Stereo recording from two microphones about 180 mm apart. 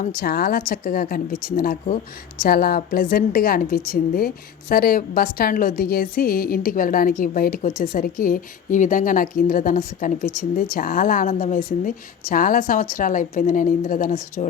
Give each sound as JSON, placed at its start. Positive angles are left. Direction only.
{"t": 0.2, "sound": "a woman's voice", "side_deg": 55}